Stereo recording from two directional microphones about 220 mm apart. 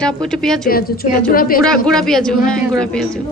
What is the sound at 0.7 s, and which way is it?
Speech, 40° left (ahead or behind).